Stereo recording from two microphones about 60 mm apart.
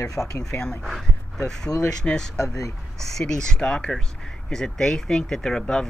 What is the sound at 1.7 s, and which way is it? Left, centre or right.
Speech, left.